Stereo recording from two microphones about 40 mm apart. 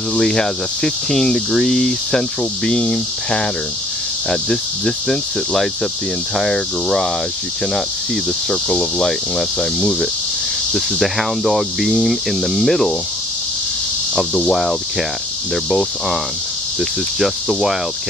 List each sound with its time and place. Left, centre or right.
0.2 s speech: centre
8.5 s speech: centre
9.6 s speech: centre
17.2 s speech: centre